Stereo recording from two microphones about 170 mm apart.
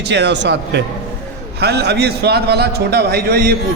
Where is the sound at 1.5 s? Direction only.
75° right (ahead or behind).